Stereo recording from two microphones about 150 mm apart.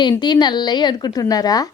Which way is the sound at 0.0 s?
30° left (ahead or behind).